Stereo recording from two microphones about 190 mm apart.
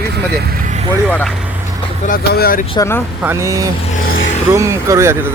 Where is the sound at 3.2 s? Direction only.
15° right (ahead or behind).